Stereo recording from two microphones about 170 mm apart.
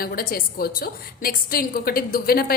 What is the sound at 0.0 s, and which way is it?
A woman's voice, 60° left (ahead or behind).